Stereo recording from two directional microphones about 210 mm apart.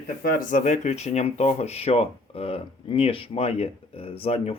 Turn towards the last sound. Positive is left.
turn(degrees=30)  # may be behind; listen again after turning